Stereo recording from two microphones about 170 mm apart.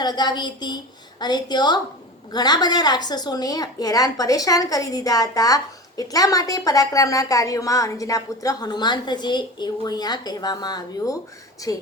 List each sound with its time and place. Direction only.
0.0 s a woman's voice: 25° left (ahead or behind)